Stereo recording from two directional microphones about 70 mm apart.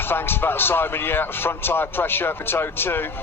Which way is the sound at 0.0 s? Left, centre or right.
Left.